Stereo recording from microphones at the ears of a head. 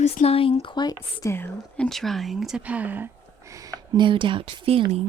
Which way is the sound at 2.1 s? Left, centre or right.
Right.